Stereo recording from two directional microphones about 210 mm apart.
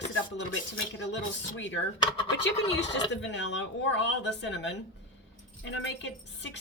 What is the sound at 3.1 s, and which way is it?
A woman's voice, 60° left (ahead or behind).